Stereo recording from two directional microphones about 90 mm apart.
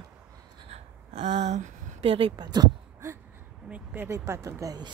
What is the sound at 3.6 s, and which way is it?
Speech, 20° right (ahead or behind).